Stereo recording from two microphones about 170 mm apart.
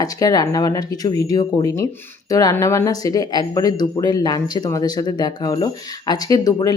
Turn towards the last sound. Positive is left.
turn(degrees=20)  # may be behind; listen again after turning